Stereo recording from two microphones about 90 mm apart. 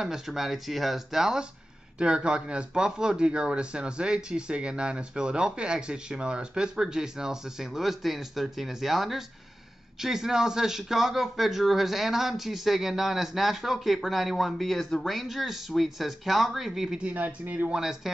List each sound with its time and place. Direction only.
0.0 s speech: 5° right (ahead or behind)
17.0 s speech: 20° right (ahead or behind)
17.7 s speech: 5° right (ahead or behind)